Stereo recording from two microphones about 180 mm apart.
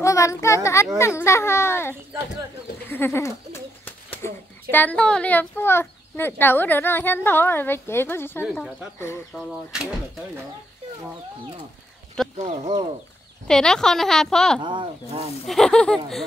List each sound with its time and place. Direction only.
0.0 s a child's voice: 15° left (ahead or behind)
9.3 s a woman's voice: centre (ahead or behind)
12.4 s speech: 35° right (ahead or behind)
13.5 s a woman's voice: 5° left (ahead or behind)
14.6 s speech: 25° right (ahead or behind)
15.4 s a woman's voice: centre (ahead or behind)